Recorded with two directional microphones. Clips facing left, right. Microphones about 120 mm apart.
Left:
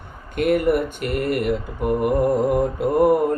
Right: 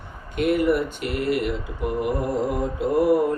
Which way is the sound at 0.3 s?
50° left (ahead or behind).